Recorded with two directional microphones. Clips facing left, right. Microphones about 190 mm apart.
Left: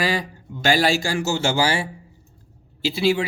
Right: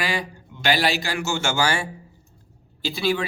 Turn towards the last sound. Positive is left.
turn(degrees=25)  # may be behind; listen again after turning